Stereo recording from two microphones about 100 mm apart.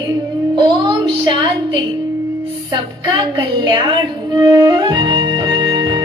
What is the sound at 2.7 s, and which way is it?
A woman's voice, 50° right (ahead or behind).